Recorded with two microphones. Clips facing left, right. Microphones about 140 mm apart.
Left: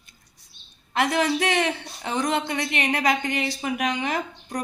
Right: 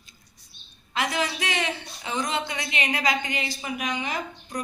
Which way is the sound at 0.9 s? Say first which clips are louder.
Left 5 dB; 60° left (ahead or behind).